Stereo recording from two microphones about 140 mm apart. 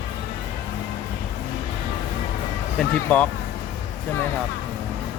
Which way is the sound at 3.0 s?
10° left (ahead or behind).